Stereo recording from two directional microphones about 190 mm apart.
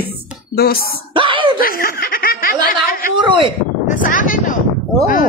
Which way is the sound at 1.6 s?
50° left (ahead or behind).